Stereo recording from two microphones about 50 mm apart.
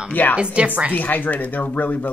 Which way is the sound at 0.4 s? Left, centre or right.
Right.